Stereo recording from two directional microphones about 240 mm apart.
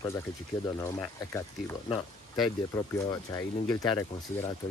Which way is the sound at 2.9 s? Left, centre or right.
Centre.